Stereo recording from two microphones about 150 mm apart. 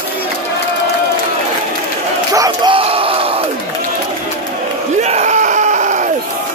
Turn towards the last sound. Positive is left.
turn(degrees=-55)  # may be behind; listen again after turning